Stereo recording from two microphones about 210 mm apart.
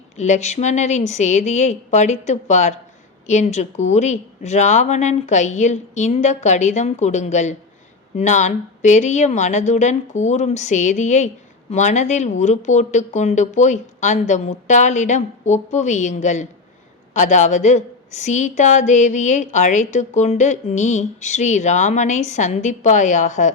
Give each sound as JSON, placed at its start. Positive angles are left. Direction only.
{"t": 0.2, "sound": "a woman's voice", "side_deg": 35}